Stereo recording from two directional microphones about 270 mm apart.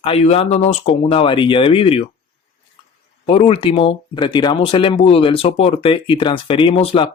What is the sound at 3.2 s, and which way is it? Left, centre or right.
Speech, left.